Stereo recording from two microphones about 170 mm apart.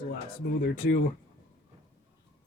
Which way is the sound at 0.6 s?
80° left.